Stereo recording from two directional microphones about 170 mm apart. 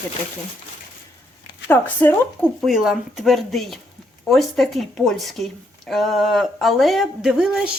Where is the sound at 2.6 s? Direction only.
Centre (ahead or behind).